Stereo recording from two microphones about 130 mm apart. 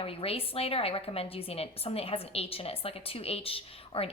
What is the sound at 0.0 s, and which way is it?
A woman's voice, 45° left (ahead or behind).